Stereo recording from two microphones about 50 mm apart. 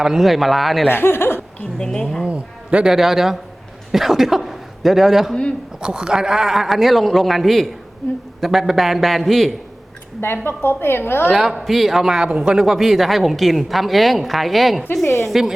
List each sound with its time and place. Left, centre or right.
0.0 s a man's voice: centre
0.9 s speech: left
1.8 s speech: centre
2.2 s speech: right
2.8 s a man's voice: centre
10.2 s a woman's voice: left
11.3 s a man's voice: centre